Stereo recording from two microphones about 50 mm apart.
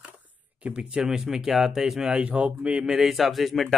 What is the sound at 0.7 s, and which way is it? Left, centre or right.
Speech, right.